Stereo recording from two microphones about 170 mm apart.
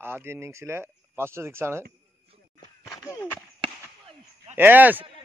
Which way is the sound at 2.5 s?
20° left (ahead or behind).